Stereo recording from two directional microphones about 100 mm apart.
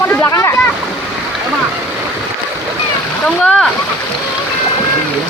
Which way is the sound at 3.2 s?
10° left (ahead or behind).